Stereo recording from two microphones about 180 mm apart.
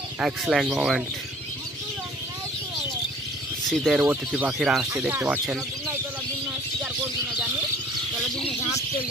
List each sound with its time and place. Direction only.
0.2 s speech: centre (ahead or behind)
3.6 s speech: centre (ahead or behind)